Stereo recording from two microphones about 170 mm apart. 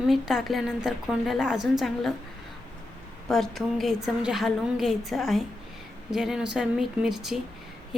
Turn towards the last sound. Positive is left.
turn(degrees=0)  # may be behind; listen again after turning